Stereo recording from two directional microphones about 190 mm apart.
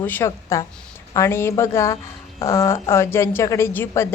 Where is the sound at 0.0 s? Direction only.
10° left (ahead or behind).